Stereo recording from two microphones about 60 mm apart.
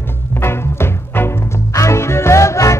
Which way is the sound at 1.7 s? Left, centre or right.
Left.